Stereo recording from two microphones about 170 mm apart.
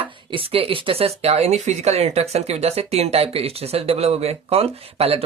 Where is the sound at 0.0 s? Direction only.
30° right (ahead or behind).